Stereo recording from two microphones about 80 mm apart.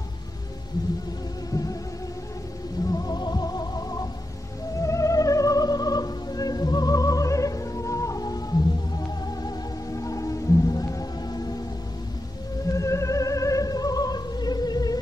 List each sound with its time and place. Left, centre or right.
1.5 s music: left
2.8 s music: left
4.7 s music: left
12.6 s music: left